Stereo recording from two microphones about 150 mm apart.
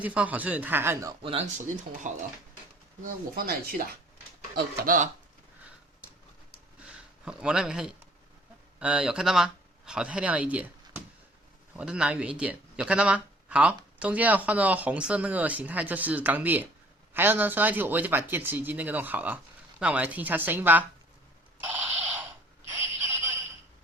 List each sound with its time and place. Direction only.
0.0 s speech: 10° right (ahead or behind)
1.2 s speech: 40° right (ahead or behind)
2.0 s speech: 55° right (ahead or behind)
3.0 s speech: 75° right (ahead or behind)
4.5 s speech: 70° right (ahead or behind)
6.8 s speech: 5° right (ahead or behind)
21.6 s a sound: 10° right (ahead or behind)